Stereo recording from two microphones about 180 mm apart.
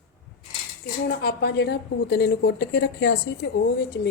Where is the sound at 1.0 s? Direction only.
60° left (ahead or behind).